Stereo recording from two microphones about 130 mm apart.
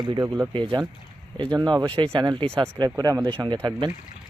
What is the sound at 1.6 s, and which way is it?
Speech, 30° right (ahead or behind).